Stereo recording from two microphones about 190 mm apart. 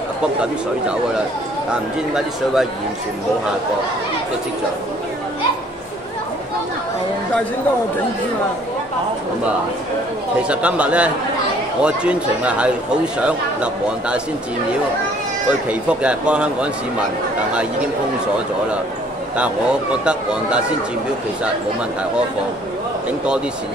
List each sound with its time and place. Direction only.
1.7 s speech: 5° right (ahead or behind)
10.5 s a man's voice: 5° right (ahead or behind)
15.7 s speech: 5° right (ahead or behind)
19.3 s speech: 5° right (ahead or behind)